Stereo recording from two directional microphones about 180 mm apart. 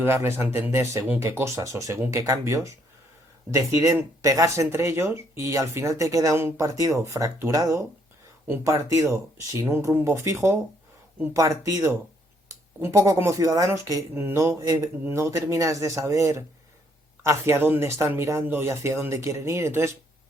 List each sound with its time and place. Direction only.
0.0 s speech: 15° right (ahead or behind)